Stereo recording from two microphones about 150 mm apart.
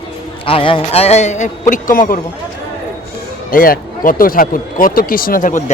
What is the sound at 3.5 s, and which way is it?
Speech, 70° left (ahead or behind).